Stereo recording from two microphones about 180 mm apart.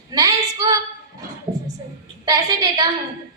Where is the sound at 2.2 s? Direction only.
20° right (ahead or behind).